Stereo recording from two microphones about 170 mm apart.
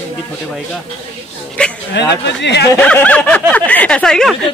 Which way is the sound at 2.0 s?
90° left.